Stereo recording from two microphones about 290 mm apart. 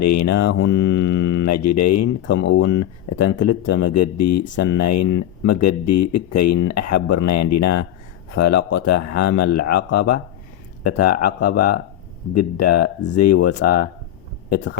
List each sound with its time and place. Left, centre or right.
0.0 s speech: left
0.6 s mantra: left
2.2 s speech: left
2.6 s speech: left
11.3 s speech: left
12.3 s speech: left
13.3 s speech: left